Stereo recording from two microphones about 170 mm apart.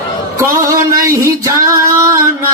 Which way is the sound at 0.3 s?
20° right (ahead or behind).